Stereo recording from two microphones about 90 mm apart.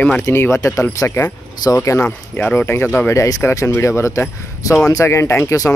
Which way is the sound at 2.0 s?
15° left (ahead or behind).